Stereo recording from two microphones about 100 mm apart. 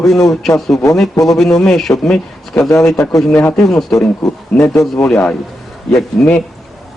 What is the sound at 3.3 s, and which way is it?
Speech, 15° left (ahead or behind).